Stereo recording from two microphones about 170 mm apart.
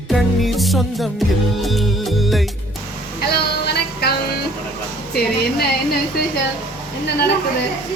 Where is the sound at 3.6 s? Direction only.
70° left (ahead or behind).